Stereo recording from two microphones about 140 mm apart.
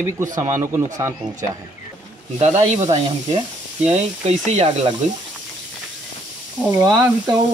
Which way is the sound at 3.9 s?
50° right (ahead or behind).